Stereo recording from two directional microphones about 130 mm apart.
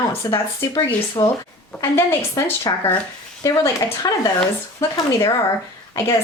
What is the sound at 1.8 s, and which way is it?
Speech, 20° left (ahead or behind).